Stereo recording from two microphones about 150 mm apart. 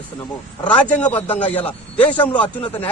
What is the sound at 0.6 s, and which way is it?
Speech, 10° left (ahead or behind).